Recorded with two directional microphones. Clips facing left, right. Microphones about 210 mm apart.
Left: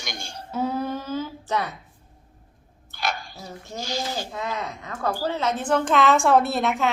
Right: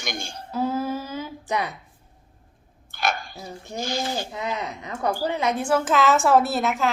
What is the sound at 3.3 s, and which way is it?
A woman's voice, 20° right (ahead or behind).